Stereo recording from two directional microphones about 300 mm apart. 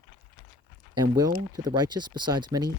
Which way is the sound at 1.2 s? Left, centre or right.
Centre.